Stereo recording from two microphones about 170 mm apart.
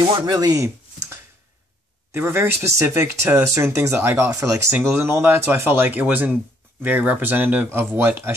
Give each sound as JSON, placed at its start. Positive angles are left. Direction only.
{"t": 0.1, "sound": "speech", "side_deg": -20}
{"t": 2.1, "sound": "speech", "side_deg": -15}